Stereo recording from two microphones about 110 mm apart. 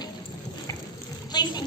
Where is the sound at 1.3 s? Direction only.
40° left (ahead or behind).